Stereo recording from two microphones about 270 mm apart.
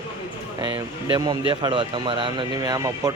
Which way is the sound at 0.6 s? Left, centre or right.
Centre.